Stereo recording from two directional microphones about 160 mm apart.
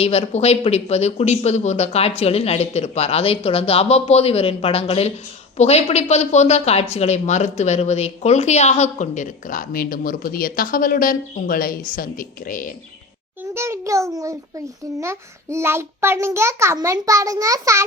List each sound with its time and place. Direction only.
0.0 s speech: 40° left (ahead or behind); by 12.7 s 60° left (ahead or behind)
13.5 s a child's voice: 15° right (ahead or behind)